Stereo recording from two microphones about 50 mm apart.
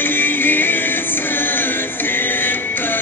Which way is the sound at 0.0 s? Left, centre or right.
Left.